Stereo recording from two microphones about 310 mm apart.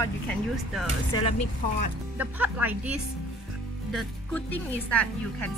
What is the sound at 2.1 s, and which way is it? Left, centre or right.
Speech, centre.